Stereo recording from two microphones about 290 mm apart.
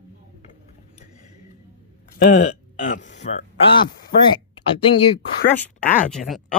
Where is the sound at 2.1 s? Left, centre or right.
Left.